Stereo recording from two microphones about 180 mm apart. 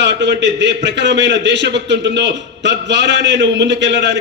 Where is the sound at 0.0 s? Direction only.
75° right (ahead or behind).